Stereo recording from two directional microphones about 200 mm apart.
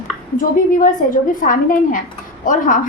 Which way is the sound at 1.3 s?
40° left (ahead or behind).